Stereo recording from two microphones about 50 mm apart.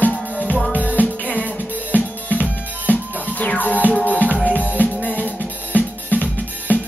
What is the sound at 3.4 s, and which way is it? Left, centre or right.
Music, left.